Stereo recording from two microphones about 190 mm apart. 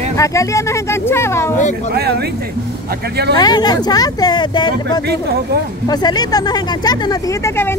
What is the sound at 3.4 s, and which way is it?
Speech, 20° left (ahead or behind).